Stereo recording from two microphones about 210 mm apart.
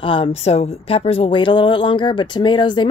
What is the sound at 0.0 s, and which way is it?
Speech, 25° left (ahead or behind).